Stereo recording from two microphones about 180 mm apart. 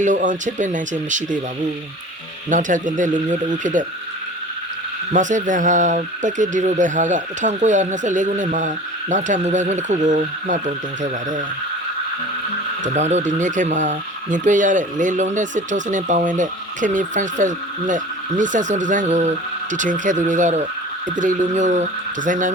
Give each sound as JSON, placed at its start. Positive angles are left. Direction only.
{"t": 0.0, "sound": "speech", "side_deg": -45}
{"t": 2.5, "sound": "speech", "side_deg": -45}
{"t": 5.1, "sound": "speech", "side_deg": -45}
{"t": 12.8, "sound": "speech", "side_deg": -40}